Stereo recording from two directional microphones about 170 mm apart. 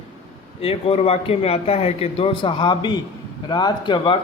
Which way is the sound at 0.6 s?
35° left (ahead or behind).